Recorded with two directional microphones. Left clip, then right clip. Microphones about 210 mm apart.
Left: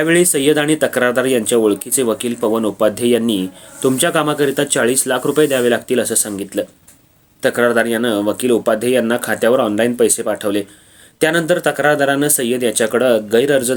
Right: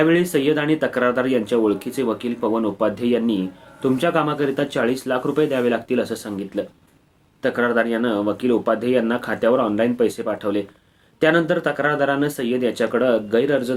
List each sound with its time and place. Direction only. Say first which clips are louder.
0.0 s speech: left 4 dB; 25° left (ahead or behind)